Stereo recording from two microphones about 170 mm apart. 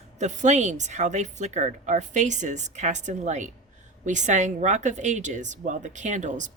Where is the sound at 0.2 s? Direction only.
45° right (ahead or behind).